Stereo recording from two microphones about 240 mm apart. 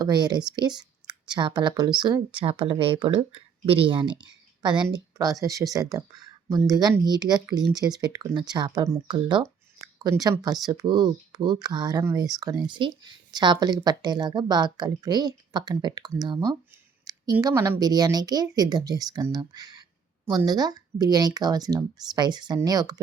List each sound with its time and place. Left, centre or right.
0.0 s speech: centre